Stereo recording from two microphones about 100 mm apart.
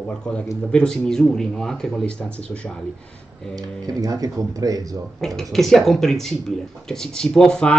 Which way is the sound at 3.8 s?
35° right (ahead or behind).